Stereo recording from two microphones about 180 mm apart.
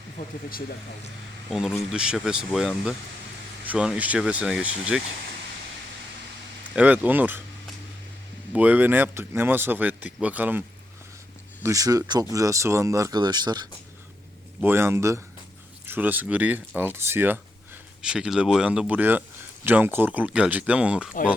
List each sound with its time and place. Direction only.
0.2 s speech: 50° left (ahead or behind)
1.5 s speech: centre (ahead or behind)
6.7 s speech: 10° right (ahead or behind)
8.5 s speech: 10° right (ahead or behind)
11.6 s speech: 20° right (ahead or behind)
14.6 s speech: 15° right (ahead or behind)